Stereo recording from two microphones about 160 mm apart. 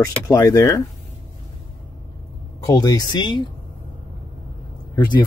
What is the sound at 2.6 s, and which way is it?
Speech, 25° left (ahead or behind).